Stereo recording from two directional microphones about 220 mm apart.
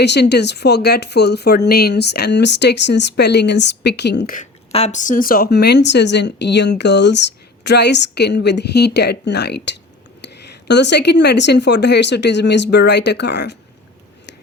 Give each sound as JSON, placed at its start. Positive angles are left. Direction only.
{"t": 0.0, "sound": "speech", "side_deg": 50}
{"t": 4.4, "sound": "speech", "side_deg": 30}